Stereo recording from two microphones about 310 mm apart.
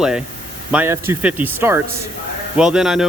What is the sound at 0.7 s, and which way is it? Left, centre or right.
Speech, centre.